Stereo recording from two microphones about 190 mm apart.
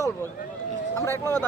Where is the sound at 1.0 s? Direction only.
15° left (ahead or behind).